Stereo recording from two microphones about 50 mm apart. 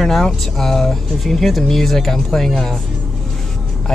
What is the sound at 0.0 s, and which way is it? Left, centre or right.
Speech, centre.